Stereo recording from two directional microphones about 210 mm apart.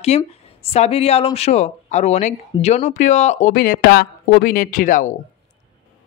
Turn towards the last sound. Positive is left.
turn(degrees=40)  # may be behind; listen again after turning